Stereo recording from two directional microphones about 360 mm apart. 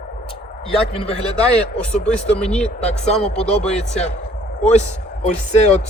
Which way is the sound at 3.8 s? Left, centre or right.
Centre.